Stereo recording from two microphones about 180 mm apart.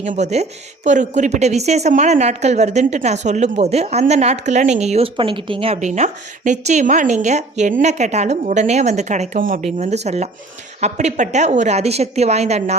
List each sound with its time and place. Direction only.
0.0 s a woman's voice: 40° right (ahead or behind)